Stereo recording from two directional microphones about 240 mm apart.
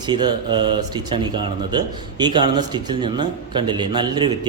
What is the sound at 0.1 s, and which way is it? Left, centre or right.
Speech, centre.